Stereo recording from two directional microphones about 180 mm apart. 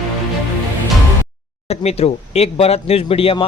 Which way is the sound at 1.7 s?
35° left (ahead or behind).